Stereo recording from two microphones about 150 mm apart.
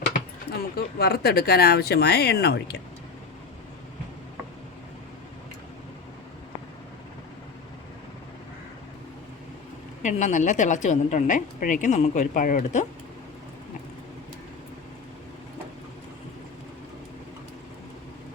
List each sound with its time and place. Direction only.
0.5 s speech: 90° left
10.0 s a woman's voice: 55° left (ahead or behind)